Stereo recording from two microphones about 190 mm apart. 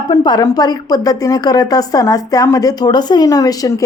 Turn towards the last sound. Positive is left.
turn(degrees=20)  # may be behind; listen again after turning